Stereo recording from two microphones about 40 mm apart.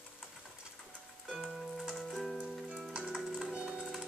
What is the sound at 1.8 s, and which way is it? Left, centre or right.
Music, centre.